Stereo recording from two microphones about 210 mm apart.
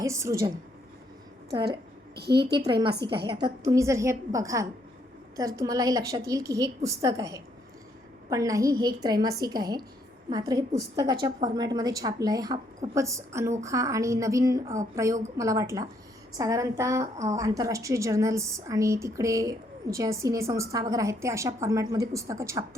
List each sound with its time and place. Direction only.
0.0 s a woman's voice: 15° right (ahead or behind)
2.1 s a woman's voice: 50° right (ahead or behind)
3.2 s a woman's voice: 20° right (ahead or behind)